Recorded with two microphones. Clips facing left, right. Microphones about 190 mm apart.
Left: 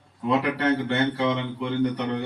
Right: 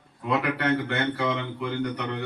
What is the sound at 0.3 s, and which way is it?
A man's voice, 30° left (ahead or behind).